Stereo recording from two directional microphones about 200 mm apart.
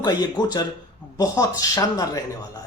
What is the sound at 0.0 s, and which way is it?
Speech, 20° left (ahead or behind).